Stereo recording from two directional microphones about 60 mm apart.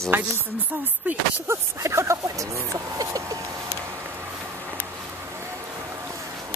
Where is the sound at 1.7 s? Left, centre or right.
Right.